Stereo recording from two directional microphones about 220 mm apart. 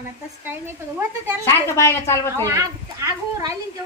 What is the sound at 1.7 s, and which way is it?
Speech, 10° left (ahead or behind).